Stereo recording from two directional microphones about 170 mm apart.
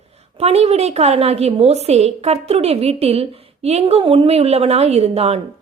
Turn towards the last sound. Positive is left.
turn(degrees=-35)  # may be behind; listen again after turning